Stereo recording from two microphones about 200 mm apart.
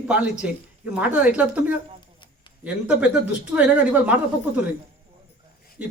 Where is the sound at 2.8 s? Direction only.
5° right (ahead or behind).